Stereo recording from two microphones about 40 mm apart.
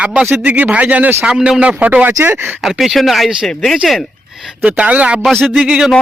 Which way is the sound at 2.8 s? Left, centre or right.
Centre.